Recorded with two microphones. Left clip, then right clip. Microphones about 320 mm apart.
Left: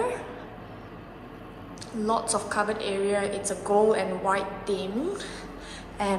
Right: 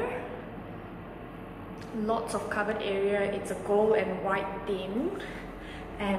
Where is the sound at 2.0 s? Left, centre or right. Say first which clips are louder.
Left 4 dB; centre.